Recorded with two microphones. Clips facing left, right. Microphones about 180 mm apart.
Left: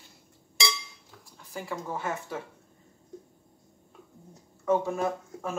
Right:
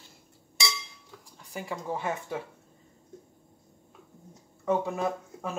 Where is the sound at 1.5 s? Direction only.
15° right (ahead or behind).